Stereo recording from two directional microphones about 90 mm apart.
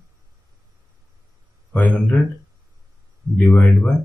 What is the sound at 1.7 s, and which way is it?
Speech, 15° left (ahead or behind).